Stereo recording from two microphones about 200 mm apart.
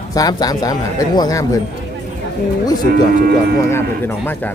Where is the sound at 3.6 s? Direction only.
10° left (ahead or behind).